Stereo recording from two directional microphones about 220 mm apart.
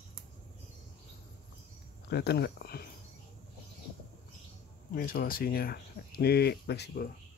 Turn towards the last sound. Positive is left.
turn(degrees=50)  # may be behind; listen again after turning